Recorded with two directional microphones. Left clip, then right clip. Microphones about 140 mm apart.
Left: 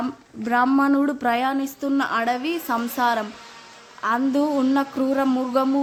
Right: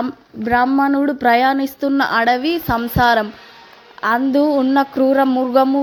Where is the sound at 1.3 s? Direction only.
30° right (ahead or behind).